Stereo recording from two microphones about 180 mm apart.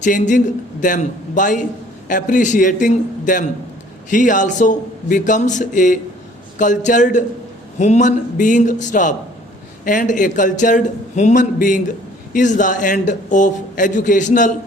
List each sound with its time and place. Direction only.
0.0 s speech: 45° left (ahead or behind)